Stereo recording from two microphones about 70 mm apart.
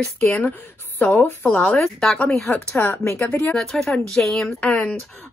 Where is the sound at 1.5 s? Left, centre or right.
Centre.